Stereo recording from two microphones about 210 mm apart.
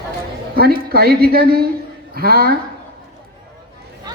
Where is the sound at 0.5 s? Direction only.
45° right (ahead or behind).